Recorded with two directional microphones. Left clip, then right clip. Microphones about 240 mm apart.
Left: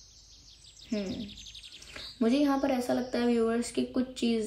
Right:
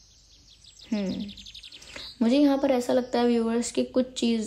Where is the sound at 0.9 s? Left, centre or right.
Centre.